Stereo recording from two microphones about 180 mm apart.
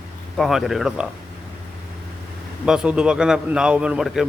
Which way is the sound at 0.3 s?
Centre (ahead or behind).